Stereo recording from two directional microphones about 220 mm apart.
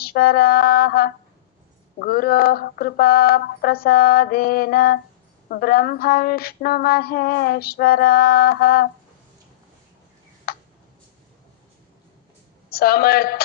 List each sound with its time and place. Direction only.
0.0 s a sound: 45° left (ahead or behind)
10.5 s tick: 45° left (ahead or behind)
12.6 s a woman's voice: 45° left (ahead or behind)